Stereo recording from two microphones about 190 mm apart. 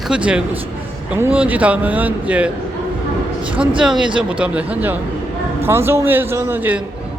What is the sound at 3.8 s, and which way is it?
A man's voice, 5° right (ahead or behind).